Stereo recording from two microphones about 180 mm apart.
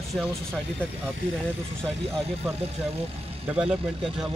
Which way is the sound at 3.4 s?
5° right (ahead or behind).